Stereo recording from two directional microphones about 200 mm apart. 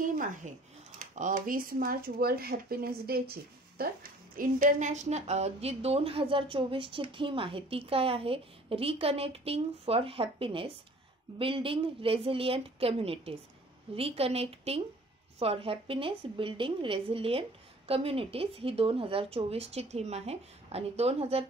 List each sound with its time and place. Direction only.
0.2 s a woman's voice: 40° right (ahead or behind)